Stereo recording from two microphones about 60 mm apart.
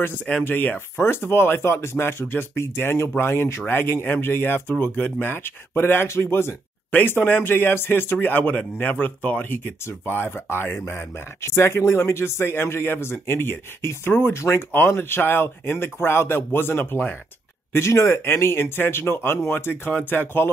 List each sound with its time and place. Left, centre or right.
0.4 s speech: left
6.9 s speech: left
17.7 s speech: left